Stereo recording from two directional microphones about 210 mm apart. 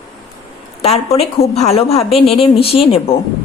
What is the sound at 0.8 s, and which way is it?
Speech, 30° left (ahead or behind).